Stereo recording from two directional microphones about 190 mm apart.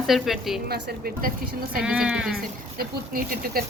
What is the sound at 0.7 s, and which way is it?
Speech, 60° right (ahead or behind).